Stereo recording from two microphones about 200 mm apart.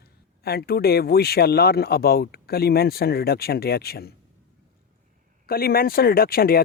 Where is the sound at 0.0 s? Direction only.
55° left (ahead or behind).